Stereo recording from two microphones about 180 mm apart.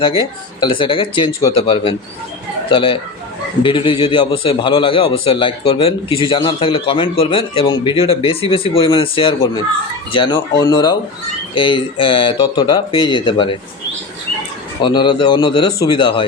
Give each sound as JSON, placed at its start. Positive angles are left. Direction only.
{"t": 0.0, "sound": "a man's voice", "side_deg": 25}
{"t": 14.8, "sound": "a man's voice", "side_deg": 25}